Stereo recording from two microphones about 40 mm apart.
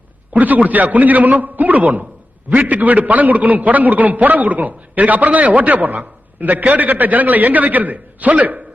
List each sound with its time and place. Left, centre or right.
0.3 s a man's voice: right